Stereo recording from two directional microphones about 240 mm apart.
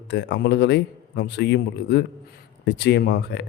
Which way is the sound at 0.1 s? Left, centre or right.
Left.